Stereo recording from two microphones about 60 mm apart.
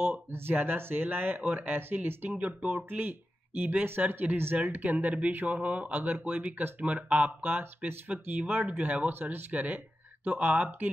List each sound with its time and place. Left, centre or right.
0.0 s speech: right